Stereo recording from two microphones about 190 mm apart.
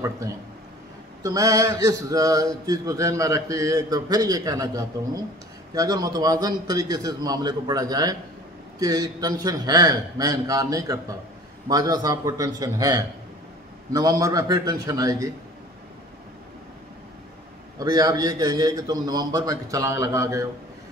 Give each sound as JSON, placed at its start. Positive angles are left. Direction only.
{"t": 1.2, "sound": "a sound", "side_deg": -15}
{"t": 5.8, "sound": "a man's voice", "side_deg": -20}
{"t": 17.7, "sound": "a man's voice", "side_deg": -20}